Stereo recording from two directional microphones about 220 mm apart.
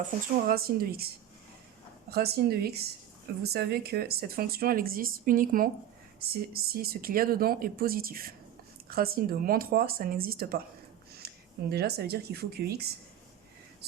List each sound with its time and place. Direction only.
0.4 s speech: 45° right (ahead or behind)
2.0 s speech: 45° right (ahead or behind)
11.2 s a sound: 45° right (ahead or behind)
11.7 s speech: 45° right (ahead or behind)